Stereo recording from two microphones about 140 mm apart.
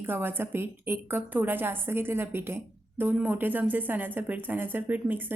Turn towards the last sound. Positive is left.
turn(degrees=-15)  # may be behind; listen again after turning